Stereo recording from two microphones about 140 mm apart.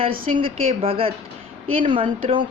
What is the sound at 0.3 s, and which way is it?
A woman's voice, 40° right (ahead or behind).